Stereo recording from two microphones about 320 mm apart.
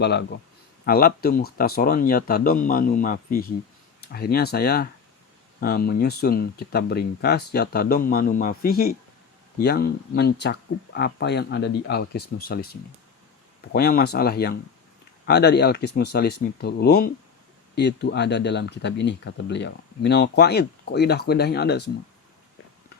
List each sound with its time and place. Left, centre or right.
0.0 s speech: left
13.7 s speech: left